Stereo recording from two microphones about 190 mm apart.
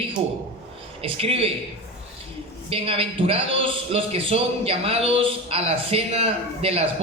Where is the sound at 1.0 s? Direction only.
30° right (ahead or behind).